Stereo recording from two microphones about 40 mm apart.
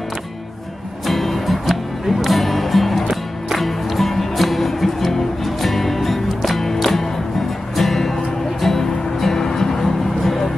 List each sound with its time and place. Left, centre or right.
1.0 s music: centre